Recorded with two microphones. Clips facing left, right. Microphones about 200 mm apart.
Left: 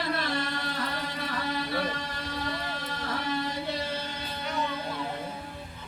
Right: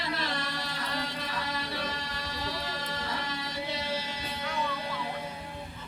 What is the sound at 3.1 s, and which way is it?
Music, 55° left (ahead or behind).